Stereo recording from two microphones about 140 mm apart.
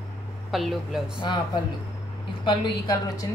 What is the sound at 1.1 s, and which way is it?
A woman's voice, 30° left (ahead or behind).